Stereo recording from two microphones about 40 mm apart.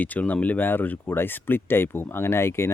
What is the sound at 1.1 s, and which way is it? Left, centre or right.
Speech, left.